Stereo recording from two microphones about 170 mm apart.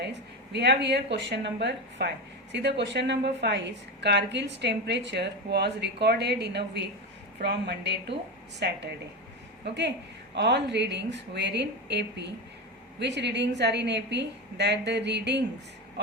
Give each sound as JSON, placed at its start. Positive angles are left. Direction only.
{"t": 0.5, "sound": "a woman's voice", "side_deg": -90}
{"t": 10.3, "sound": "speech", "side_deg": -90}